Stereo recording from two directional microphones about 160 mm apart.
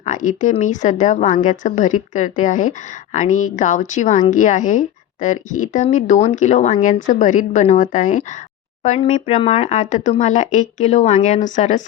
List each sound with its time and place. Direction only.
0.0 s a woman's voice: 50° left (ahead or behind)